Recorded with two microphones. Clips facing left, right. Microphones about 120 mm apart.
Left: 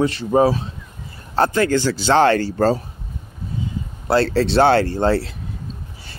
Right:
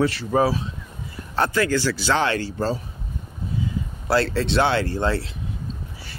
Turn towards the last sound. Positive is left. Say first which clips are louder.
# left 5 dB
turn(degrees=35)  # may be behind; listen again after turning